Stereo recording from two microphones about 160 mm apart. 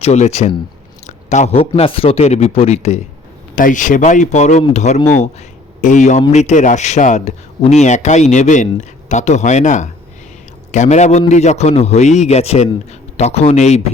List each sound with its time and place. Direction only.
0.0 s a man's voice: 45° left (ahead or behind)
3.5 s a man's voice: 55° left (ahead or behind)